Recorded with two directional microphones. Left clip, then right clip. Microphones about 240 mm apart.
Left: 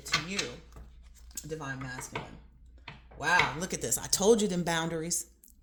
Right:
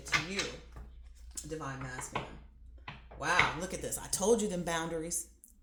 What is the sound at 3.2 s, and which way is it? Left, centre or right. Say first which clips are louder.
Speech: left 3 dB; left.